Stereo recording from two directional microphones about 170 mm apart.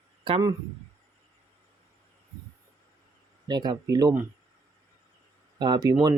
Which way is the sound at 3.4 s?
25° right (ahead or behind).